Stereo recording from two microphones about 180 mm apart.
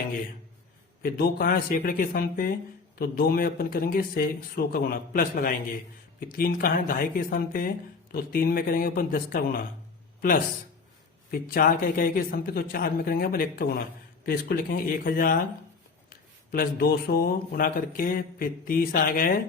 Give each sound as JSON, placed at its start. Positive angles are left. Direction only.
{"t": 1.0, "sound": "speech", "side_deg": 55}
{"t": 11.3, "sound": "speech", "side_deg": 55}